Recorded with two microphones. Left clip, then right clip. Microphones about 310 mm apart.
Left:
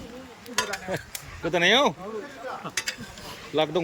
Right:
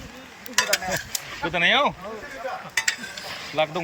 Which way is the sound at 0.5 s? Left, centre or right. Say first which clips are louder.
Right 6 dB; right.